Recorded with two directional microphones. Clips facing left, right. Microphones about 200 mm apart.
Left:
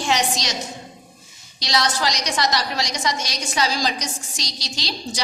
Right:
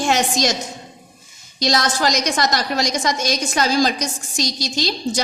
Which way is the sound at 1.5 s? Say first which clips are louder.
Right 3 dB; 45° right (ahead or behind).